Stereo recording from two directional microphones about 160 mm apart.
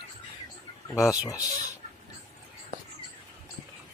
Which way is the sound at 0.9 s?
20° left (ahead or behind).